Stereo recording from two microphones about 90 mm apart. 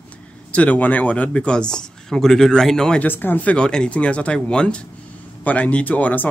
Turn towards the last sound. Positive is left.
turn(degrees=20)  # may be behind; listen again after turning